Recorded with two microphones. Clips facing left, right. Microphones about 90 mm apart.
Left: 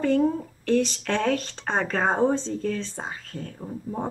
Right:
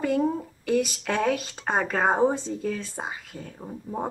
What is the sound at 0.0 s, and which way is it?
Speech, 10° right (ahead or behind).